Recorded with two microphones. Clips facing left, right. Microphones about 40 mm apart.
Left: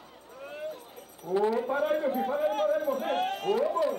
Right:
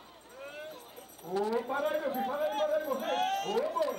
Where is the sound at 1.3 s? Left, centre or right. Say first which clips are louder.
Left 5 dB; left.